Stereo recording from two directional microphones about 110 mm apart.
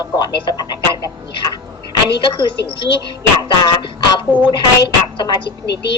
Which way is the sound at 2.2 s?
45° left (ahead or behind).